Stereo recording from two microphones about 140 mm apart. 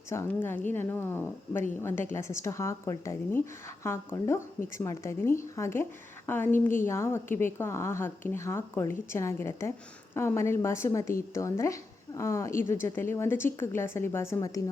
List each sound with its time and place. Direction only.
0.1 s a woman's voice: 15° left (ahead or behind)